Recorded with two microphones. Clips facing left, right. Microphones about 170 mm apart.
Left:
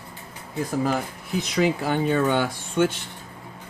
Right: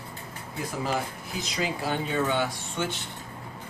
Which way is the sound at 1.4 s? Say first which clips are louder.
Left 8 dB; 60° left (ahead or behind).